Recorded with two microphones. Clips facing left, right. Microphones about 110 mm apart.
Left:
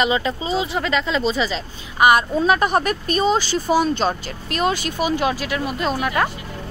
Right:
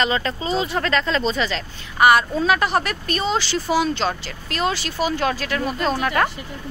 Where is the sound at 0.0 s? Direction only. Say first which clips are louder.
Left 2 dB; 10° left (ahead or behind).